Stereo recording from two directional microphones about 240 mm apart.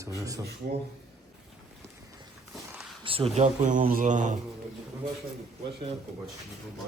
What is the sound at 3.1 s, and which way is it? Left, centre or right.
Speech, right.